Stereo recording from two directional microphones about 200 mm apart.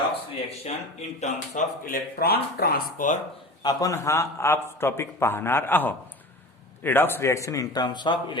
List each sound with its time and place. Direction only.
0.6 s speech: 35° left (ahead or behind)
3.6 s a man's voice: 20° left (ahead or behind)